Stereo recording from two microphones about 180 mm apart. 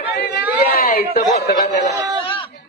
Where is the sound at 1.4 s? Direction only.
50° left (ahead or behind).